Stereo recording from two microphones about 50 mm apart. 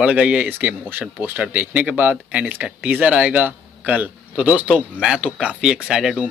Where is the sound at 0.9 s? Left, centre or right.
Right.